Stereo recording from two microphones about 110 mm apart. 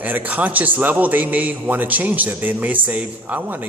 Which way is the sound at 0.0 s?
15° right (ahead or behind).